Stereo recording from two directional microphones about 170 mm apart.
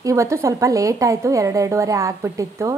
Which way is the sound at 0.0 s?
20° right (ahead or behind).